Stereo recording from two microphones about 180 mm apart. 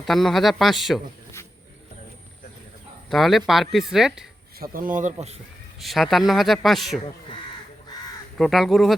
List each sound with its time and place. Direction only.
0.0 s speech: centre (ahead or behind)
3.1 s speech: centre (ahead or behind)
4.6 s a man's voice: 50° right (ahead or behind)
5.8 s speech: centre (ahead or behind)
8.4 s speech: centre (ahead or behind)